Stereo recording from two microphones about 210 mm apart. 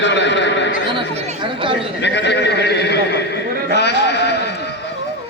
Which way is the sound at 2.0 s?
55° left (ahead or behind).